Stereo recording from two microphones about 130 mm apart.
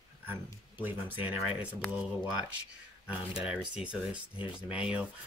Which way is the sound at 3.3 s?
10° right (ahead or behind).